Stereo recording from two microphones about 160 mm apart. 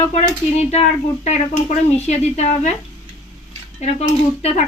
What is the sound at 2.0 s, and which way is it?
Speech, 45° left (ahead or behind).